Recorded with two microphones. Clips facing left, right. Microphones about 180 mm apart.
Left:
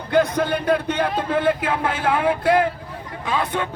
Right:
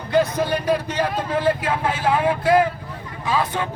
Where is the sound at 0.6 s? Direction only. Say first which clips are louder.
Left 1 dB; 60° left (ahead or behind).